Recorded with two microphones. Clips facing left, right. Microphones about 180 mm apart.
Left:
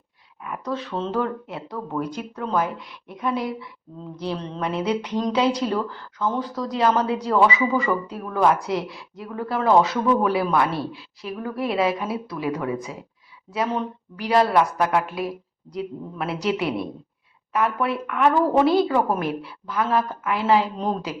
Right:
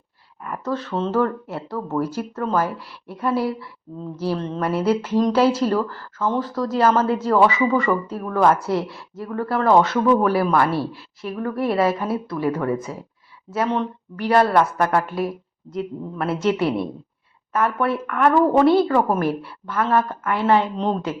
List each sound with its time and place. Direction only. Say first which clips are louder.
0.4 s a woman's voice: right 3 dB; 5° left (ahead or behind)